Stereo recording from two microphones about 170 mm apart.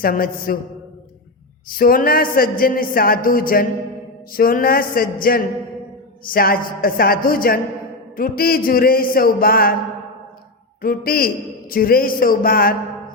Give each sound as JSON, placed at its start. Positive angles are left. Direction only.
{"t": 0.0, "sound": "speech", "side_deg": 60}
{"t": 1.7, "sound": "speech", "side_deg": 60}
{"t": 10.8, "sound": "speech", "side_deg": 60}